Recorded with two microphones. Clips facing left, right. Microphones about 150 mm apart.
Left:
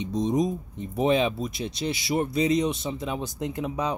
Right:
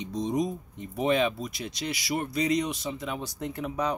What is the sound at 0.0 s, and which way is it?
Speech, 20° left (ahead or behind).